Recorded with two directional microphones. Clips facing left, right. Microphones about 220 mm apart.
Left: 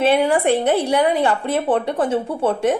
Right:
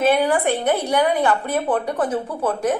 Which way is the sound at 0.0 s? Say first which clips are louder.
Left 2 dB; 25° left (ahead or behind).